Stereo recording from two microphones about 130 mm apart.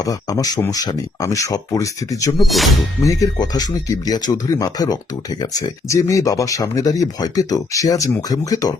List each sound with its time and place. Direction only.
0.0 s speech: 25° left (ahead or behind)
2.5 s speech: centre (ahead or behind)
3.0 s speech: 25° left (ahead or behind)